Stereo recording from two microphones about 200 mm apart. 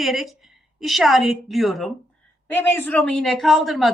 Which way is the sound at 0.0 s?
Centre (ahead or behind).